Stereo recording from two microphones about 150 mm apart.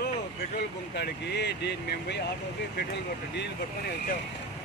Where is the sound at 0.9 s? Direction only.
90° left.